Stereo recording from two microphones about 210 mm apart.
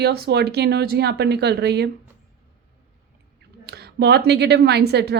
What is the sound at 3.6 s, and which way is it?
A woman's voice, 50° right (ahead or behind).